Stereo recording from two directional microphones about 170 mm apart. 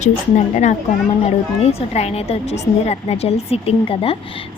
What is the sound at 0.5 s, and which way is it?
A child's voice, 45° left (ahead or behind).